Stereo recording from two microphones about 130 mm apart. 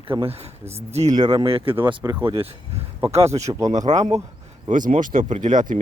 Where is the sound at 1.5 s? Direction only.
45° right (ahead or behind).